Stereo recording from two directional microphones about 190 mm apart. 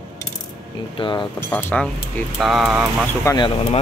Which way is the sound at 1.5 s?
10° left (ahead or behind).